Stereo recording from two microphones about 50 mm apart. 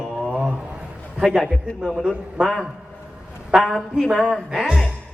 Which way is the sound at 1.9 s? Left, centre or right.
Centre.